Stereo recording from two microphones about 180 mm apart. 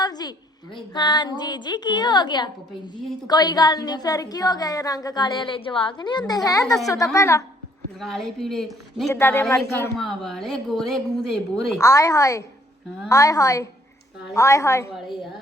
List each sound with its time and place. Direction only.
0.0 s a woman's voice: 20° left (ahead or behind)
7.9 s a woman's voice: centre (ahead or behind)
9.0 s speech: 15° left (ahead or behind)
10.0 s a woman's voice: centre (ahead or behind)
11.8 s a woman's voice: 20° left (ahead or behind)